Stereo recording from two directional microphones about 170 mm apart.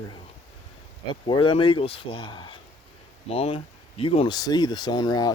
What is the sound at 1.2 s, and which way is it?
Speech, 30° left (ahead or behind).